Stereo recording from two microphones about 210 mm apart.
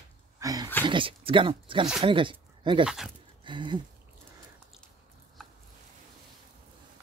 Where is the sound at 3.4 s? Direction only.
20° right (ahead or behind).